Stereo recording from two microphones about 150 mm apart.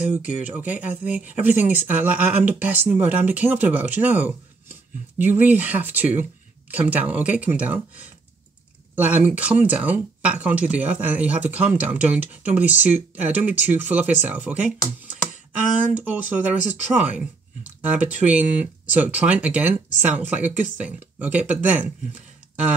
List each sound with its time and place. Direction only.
0.6 s speech: 10° right (ahead or behind)